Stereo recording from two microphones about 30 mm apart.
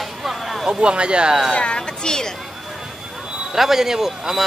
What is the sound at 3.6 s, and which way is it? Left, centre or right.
Speech, centre.